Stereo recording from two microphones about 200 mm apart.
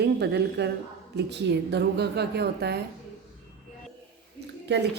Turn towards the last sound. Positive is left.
turn(degrees=-55)  # may be behind; listen again after turning